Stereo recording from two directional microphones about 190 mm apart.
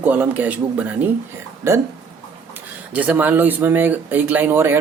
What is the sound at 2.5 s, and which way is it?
Speech, 10° right (ahead or behind).